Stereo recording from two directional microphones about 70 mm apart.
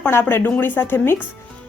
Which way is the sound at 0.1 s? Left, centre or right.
Left.